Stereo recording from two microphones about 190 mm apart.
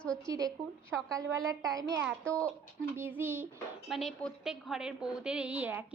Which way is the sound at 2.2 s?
5° left (ahead or behind).